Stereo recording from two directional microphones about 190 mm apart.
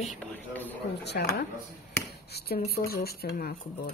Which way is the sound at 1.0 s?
60° left (ahead or behind).